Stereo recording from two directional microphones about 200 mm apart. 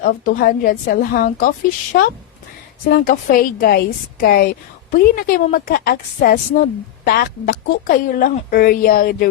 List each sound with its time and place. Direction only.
0.0 s a woman's voice: 45° left (ahead or behind)